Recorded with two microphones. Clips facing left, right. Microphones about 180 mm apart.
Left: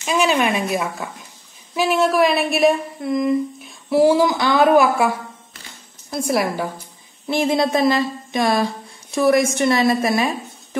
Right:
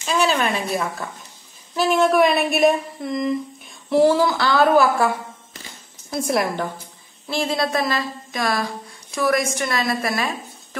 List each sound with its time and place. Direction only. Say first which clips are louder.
0.0 s a woman's voice: left 2 dB; 15° left (ahead or behind)
6.0 s a woman's voice: left 1 dB; centre (ahead or behind)
7.2 s a woman's voice: left 4 dB; 20° left (ahead or behind)